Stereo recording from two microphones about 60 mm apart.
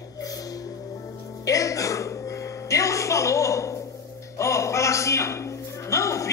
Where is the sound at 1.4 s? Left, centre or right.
Left.